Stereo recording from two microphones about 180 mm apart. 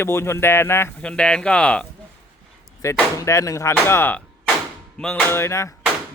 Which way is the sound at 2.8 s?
15° left (ahead or behind).